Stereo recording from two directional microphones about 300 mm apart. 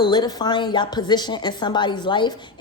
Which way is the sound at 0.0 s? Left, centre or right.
Centre.